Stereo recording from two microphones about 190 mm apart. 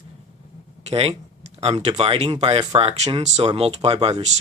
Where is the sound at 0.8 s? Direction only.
30° right (ahead or behind).